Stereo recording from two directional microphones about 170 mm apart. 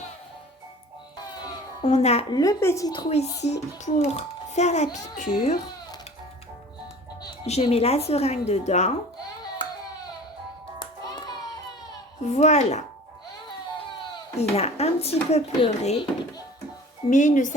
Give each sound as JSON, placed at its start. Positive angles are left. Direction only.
{"t": 1.8, "sound": "a child's voice", "side_deg": 40}
{"t": 2.3, "sound": "a woman's voice", "side_deg": 20}
{"t": 3.1, "sound": "a child's voice", "side_deg": 40}
{"t": 7.4, "sound": "a child's voice", "side_deg": 40}
{"t": 10.8, "sound": "music", "side_deg": 25}
{"t": 12.2, "sound": "speech", "side_deg": 45}
{"t": 14.3, "sound": "a child's voice", "side_deg": 40}
{"t": 17.1, "sound": "speech", "side_deg": 45}